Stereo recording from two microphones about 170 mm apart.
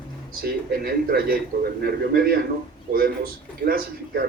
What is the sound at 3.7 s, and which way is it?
Speech, 60° right (ahead or behind).